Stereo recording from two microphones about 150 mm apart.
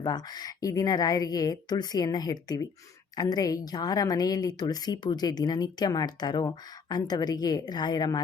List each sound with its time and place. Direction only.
0.0 s a woman's voice: 30° left (ahead or behind)